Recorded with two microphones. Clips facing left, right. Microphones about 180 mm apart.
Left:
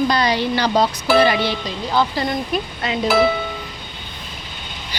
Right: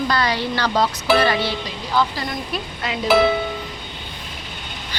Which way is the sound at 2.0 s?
30° left (ahead or behind).